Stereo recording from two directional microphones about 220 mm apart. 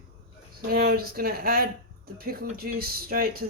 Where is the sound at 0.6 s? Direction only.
45° right (ahead or behind).